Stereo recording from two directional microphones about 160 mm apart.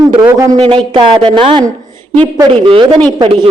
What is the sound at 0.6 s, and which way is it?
A woman's voice, 30° right (ahead or behind).